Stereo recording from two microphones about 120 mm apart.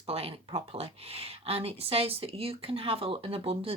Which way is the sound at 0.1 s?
55° right (ahead or behind).